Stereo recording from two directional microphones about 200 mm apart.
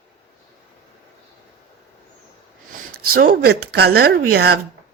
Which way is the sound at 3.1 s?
50° right (ahead or behind).